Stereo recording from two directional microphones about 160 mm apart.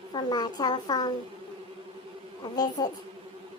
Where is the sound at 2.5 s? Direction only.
25° left (ahead or behind).